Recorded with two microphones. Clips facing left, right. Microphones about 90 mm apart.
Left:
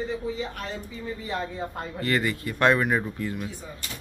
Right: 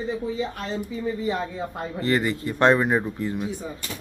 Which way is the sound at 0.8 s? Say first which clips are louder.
Right 8 dB; 15° right (ahead or behind).